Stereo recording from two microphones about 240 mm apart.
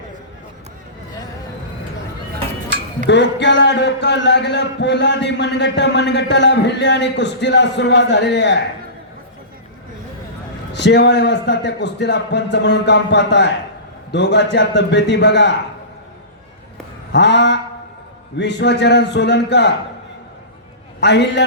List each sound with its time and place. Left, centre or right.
3.1 s a man's voice: left
10.7 s a man's voice: left
17.1 s a man's voice: left
21.0 s a man's voice: left